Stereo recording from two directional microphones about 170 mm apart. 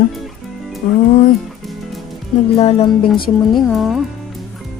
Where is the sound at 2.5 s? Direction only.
35° left (ahead or behind).